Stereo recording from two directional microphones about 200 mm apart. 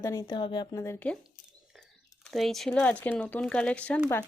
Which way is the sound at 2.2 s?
Centre (ahead or behind).